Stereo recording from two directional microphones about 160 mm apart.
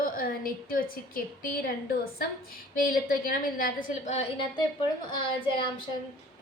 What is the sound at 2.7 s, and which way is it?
A woman's voice, 65° left (ahead or behind).